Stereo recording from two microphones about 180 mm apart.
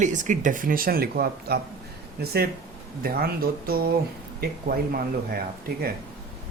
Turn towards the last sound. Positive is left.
turn(degrees=-55)  # may be behind; listen again after turning